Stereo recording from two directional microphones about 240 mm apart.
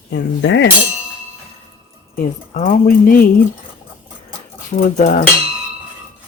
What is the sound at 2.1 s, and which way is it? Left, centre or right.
Speech, left.